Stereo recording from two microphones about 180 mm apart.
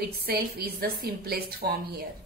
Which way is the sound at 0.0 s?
60° right (ahead or behind).